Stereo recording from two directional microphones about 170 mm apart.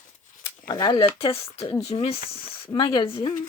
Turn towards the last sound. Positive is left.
turn(degrees=35)  # may be behind; listen again after turning